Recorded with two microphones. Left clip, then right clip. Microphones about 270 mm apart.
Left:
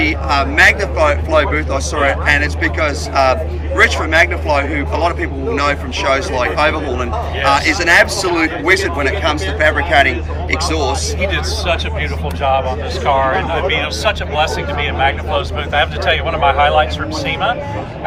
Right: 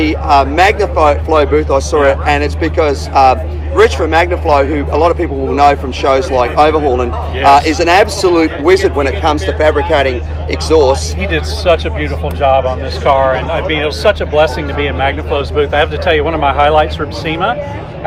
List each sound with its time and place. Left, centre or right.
0.0 s speech: centre
11.2 s speech: right